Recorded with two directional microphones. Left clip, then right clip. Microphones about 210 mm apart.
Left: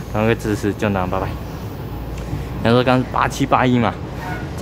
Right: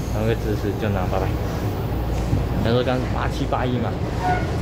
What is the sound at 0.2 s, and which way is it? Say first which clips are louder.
Speech: left 6 dB; 30° left (ahead or behind).